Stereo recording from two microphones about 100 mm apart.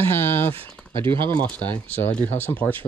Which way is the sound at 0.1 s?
20° left (ahead or behind).